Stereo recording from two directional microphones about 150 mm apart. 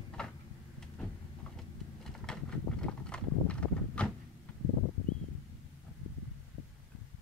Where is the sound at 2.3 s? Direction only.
5° left (ahead or behind).